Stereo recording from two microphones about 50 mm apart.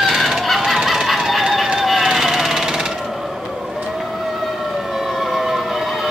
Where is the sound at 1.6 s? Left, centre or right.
Centre.